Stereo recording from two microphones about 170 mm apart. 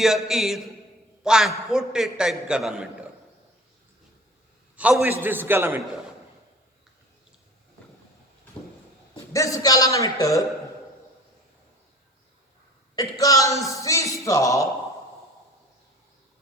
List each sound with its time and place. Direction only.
0.0 s a man's voice: centre (ahead or behind)
4.8 s a man's voice: 10° right (ahead or behind)
9.1 s a man's voice: 20° left (ahead or behind)
13.0 s speech: 20° left (ahead or behind)